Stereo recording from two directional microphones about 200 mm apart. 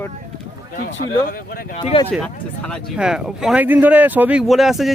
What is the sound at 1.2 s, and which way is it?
Speech, 45° left (ahead or behind).